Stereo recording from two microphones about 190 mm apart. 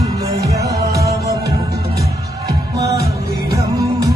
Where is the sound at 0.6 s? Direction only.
60° right (ahead or behind).